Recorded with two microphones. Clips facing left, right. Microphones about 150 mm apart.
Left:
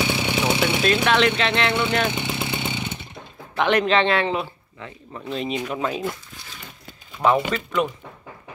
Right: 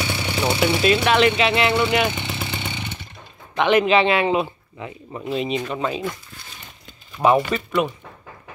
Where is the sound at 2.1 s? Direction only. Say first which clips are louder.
Left 2 dB; 15° left (ahead or behind).